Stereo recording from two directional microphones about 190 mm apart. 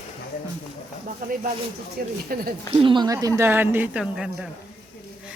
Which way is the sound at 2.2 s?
50° right (ahead or behind).